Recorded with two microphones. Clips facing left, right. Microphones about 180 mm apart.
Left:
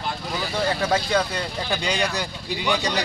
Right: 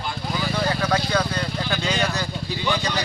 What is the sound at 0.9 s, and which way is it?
Speech, 20° left (ahead or behind).